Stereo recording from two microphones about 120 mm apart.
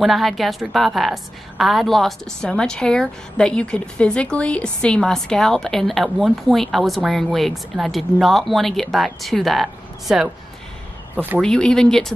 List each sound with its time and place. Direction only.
0.0 s a woman's voice: centre (ahead or behind)
11.1 s speech: 15° right (ahead or behind)
11.4 s speech: 5° left (ahead or behind)